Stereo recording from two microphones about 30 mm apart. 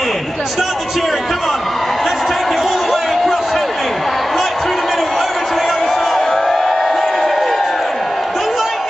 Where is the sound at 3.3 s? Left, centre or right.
Centre.